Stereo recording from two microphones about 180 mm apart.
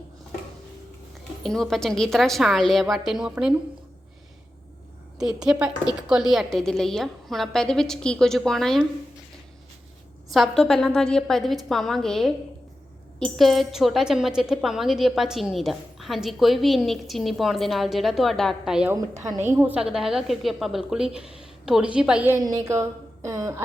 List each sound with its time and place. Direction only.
1.5 s a woman's voice: centre (ahead or behind)
5.2 s a woman's voice: 5° right (ahead or behind)
10.3 s a woman's voice: centre (ahead or behind)
19.1 s a woman's voice: 20° right (ahead or behind)
22.4 s a sound: 15° right (ahead or behind)